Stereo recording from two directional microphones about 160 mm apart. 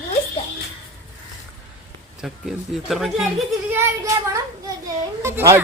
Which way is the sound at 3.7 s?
20° right (ahead or behind).